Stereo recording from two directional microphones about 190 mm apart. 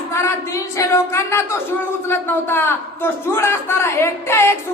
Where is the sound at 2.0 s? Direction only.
10° left (ahead or behind).